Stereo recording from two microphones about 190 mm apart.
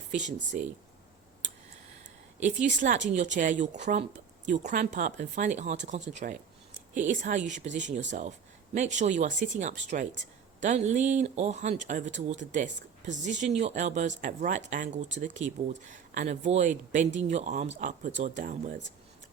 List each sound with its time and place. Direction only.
0.1 s speech: 40° right (ahead or behind)
2.6 s speech: 40° right (ahead or behind)